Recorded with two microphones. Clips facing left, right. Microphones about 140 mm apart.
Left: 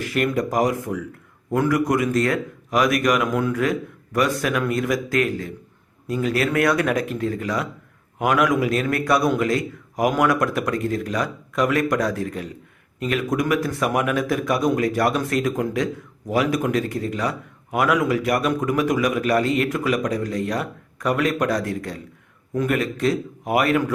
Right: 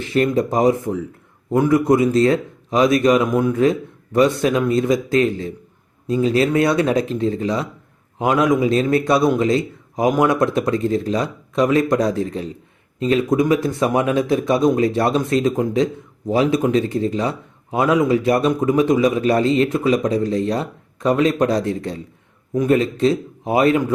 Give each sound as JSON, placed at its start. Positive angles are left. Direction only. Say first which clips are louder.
{"t": 0.0, "sound": "a man's voice", "louder": "right 4 dB", "side_deg": -25}